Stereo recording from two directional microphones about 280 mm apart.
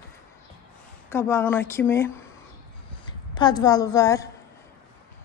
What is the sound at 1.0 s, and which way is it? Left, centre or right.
A woman's voice, centre.